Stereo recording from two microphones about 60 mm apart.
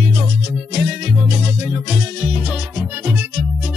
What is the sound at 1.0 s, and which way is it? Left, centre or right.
Music, right.